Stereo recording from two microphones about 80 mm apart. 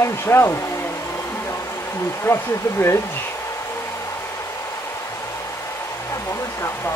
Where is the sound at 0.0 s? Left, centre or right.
Left.